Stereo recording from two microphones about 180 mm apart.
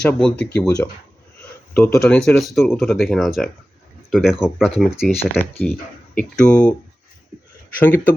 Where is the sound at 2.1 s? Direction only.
5° left (ahead or behind).